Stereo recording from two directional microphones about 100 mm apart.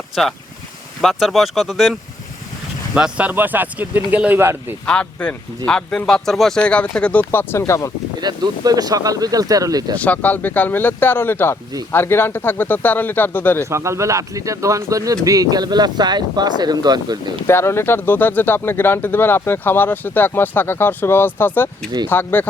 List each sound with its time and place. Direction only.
1.0 s speech: centre (ahead or behind)
2.9 s speech: 10° right (ahead or behind)
4.9 s speech: 10° left (ahead or behind)
8.2 s speech: 45° right (ahead or behind)
10.0 s speech: 15° left (ahead or behind)
13.7 s speech: 30° right (ahead or behind); by 17.3 s 45° right (ahead or behind)
17.4 s speech: 25° left (ahead or behind)